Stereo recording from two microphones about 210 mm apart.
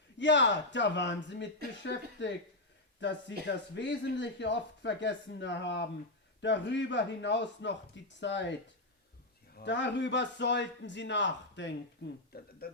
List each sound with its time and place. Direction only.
0.2 s speech: 60° left (ahead or behind)
9.6 s speech: 55° left (ahead or behind)
12.3 s speech: 45° left (ahead or behind)